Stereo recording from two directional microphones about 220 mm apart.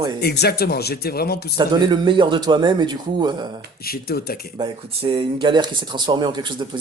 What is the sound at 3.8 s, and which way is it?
Speech, 45° left (ahead or behind).